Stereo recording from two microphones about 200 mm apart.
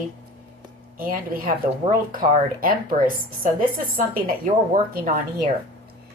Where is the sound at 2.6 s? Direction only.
45° right (ahead or behind).